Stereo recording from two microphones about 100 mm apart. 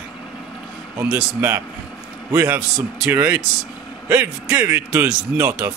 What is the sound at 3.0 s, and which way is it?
Speech, 20° right (ahead or behind).